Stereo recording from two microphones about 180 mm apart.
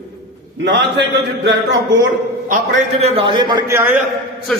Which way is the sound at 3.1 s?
30° right (ahead or behind).